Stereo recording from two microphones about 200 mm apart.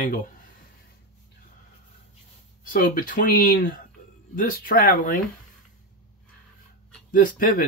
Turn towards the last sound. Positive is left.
turn(degrees=45)  # may be behind; listen again after turning